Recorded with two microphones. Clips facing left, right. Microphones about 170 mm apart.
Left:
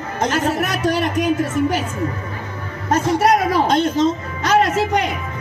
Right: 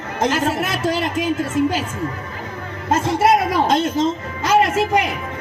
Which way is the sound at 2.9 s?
25° right (ahead or behind).